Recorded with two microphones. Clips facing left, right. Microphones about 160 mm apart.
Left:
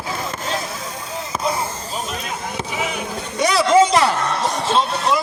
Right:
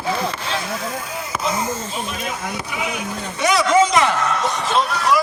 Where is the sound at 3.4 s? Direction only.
35° left (ahead or behind).